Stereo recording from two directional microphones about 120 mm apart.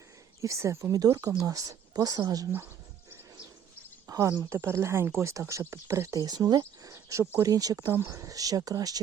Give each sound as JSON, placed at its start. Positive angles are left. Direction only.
{"t": 0.4, "sound": "speech", "side_deg": -25}
{"t": 4.0, "sound": "speech", "side_deg": -30}